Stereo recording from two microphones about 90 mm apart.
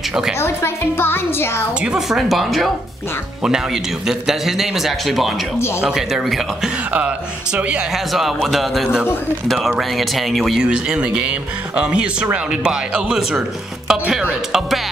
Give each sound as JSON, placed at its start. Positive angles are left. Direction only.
{"t": 0.4, "sound": "a woman's voice", "side_deg": 25}
{"t": 1.8, "sound": "speech", "side_deg": -5}
{"t": 8.1, "sound": "speech", "side_deg": 0}